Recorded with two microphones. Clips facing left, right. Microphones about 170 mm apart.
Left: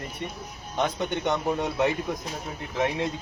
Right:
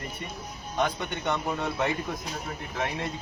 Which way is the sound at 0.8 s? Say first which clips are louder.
Left 4 dB; 15° left (ahead or behind).